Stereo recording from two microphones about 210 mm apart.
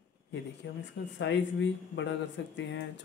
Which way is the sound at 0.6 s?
60° left (ahead or behind).